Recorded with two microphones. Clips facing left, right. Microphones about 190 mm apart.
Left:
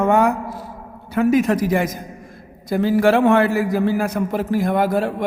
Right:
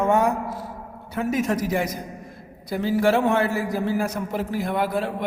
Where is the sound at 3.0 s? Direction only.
85° left; by 3.6 s 70° left (ahead or behind).